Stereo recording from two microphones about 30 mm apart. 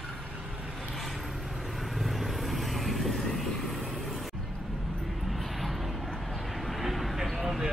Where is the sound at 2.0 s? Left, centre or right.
Centre.